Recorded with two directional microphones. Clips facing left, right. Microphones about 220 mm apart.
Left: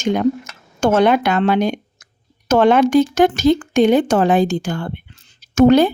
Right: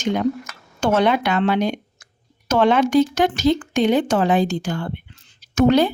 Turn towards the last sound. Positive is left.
turn(degrees=50)  # may be behind; listen again after turning